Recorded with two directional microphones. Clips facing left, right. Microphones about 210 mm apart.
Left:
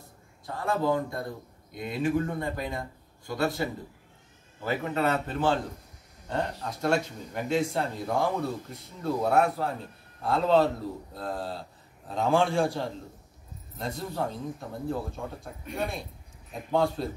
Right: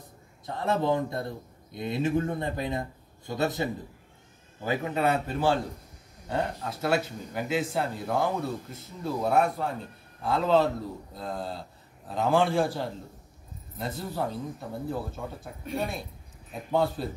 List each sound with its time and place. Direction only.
0.6 s speech: 25° right (ahead or behind)
4.6 s speech: 15° right (ahead or behind)